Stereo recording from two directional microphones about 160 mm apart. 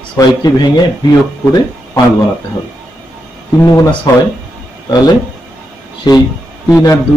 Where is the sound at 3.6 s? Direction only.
20° left (ahead or behind).